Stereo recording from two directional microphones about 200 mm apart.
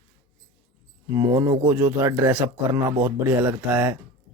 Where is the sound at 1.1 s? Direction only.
15° right (ahead or behind).